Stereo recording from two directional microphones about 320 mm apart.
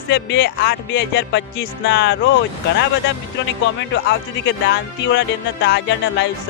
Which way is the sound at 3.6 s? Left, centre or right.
Left.